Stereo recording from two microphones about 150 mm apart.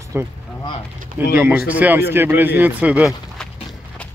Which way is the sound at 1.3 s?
15° right (ahead or behind).